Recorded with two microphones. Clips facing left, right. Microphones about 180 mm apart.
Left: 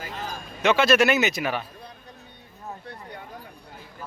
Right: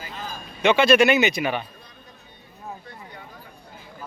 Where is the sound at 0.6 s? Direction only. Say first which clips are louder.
Right 3 dB; centre (ahead or behind).